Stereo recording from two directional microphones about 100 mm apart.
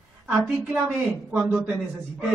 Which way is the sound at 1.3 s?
15° right (ahead or behind).